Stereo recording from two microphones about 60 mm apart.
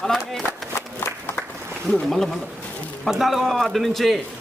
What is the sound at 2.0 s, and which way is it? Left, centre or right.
A man's voice, centre.